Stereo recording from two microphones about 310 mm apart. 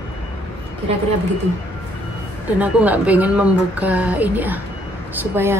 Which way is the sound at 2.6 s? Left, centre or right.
Centre.